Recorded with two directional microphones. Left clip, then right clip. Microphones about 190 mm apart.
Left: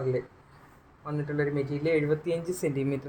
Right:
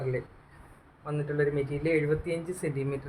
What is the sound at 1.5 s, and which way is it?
Speech, 15° left (ahead or behind).